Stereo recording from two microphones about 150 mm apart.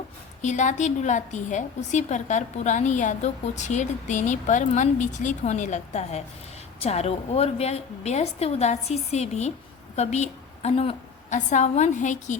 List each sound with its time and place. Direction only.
0.4 s a woman's voice: 50° left (ahead or behind)